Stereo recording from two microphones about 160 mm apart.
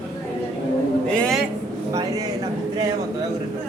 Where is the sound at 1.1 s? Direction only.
5° left (ahead or behind).